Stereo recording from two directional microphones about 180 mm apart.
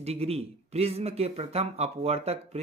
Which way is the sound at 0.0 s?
35° right (ahead or behind).